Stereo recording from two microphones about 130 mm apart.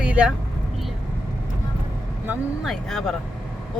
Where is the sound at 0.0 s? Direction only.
10° right (ahead or behind).